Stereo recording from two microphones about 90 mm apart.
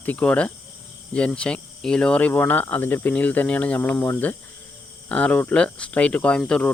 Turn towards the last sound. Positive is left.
turn(degrees=10)  # may be behind; listen again after turning